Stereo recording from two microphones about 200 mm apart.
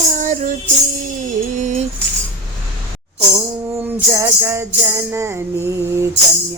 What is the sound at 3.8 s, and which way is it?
Music, 10° right (ahead or behind).